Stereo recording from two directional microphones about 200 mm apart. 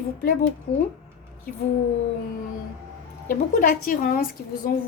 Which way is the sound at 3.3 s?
45° left (ahead or behind).